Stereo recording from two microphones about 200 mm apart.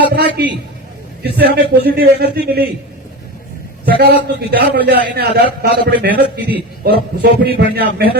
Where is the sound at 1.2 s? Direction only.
50° right (ahead or behind).